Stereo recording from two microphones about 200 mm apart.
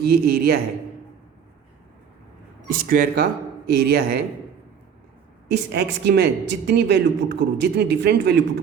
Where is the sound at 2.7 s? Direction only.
45° right (ahead or behind).